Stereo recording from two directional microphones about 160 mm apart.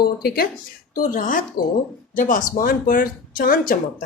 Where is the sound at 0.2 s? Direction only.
70° left (ahead or behind).